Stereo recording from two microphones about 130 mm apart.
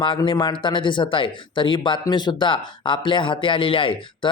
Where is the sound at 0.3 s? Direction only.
40° left (ahead or behind).